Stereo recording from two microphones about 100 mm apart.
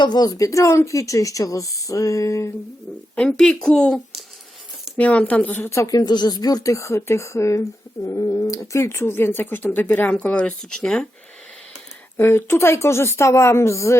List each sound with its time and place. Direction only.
0.0 s speech: 45° left (ahead or behind)
3.2 s speech: 5° left (ahead or behind)
12.1 s speech: 25° left (ahead or behind)